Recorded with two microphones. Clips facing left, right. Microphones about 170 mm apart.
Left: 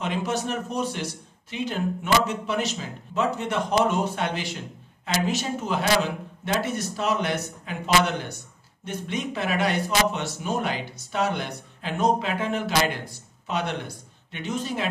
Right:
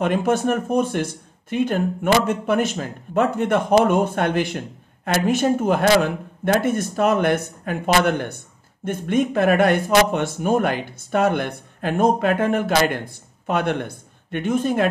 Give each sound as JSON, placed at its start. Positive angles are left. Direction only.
{"t": 0.0, "sound": "speech", "side_deg": -55}